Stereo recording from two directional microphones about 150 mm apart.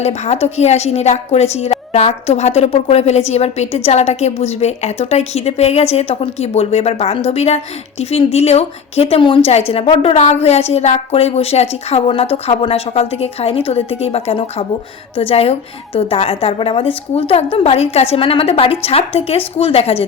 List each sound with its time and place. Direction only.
0.0 s a woman's voice: 45° left (ahead or behind)